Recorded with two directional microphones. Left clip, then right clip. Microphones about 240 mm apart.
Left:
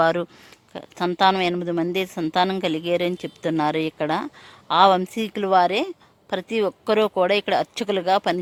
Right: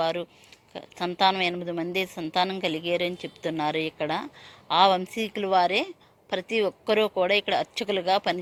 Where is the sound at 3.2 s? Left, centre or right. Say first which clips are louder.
Left 5 dB; left.